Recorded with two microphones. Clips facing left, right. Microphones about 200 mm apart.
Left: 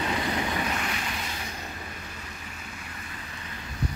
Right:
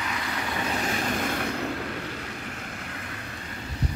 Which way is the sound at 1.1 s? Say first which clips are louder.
Right 8 dB; 55° right (ahead or behind).